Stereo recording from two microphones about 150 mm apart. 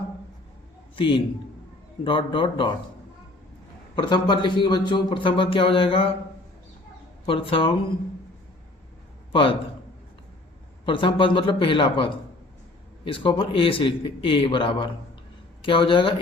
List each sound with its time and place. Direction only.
0.9 s a man's voice: 35° left (ahead or behind)
3.9 s speech: 30° left (ahead or behind)
7.3 s speech: 35° left (ahead or behind)
9.3 s a man's voice: 35° left (ahead or behind)
10.8 s speech: 35° left (ahead or behind)